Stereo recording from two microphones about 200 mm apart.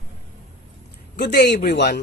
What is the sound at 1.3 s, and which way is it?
Speech, 60° left (ahead or behind).